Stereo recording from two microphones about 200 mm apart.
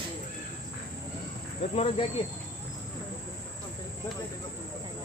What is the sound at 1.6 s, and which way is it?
Speech, 30° left (ahead or behind).